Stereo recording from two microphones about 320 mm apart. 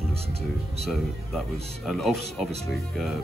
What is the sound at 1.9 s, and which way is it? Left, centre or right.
Speech, centre.